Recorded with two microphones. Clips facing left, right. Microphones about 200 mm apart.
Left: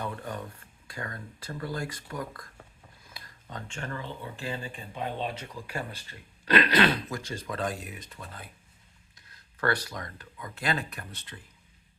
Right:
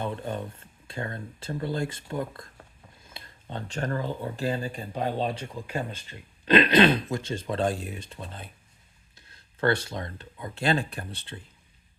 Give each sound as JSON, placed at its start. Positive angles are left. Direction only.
{"t": 0.0, "sound": "speech", "side_deg": -25}